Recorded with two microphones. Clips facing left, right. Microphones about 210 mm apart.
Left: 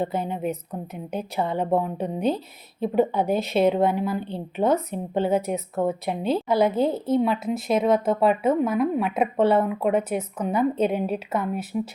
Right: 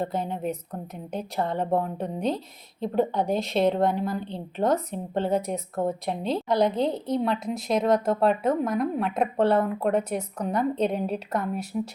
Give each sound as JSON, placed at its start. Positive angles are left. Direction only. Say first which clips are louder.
{"t": 0.0, "sound": "a woman's voice", "louder": "left 2 dB", "side_deg": 0}